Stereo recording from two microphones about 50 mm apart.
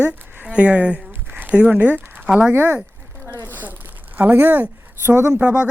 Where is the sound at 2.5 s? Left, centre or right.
Right.